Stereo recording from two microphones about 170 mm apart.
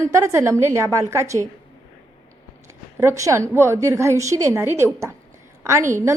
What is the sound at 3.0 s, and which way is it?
A woman's voice, 15° right (ahead or behind).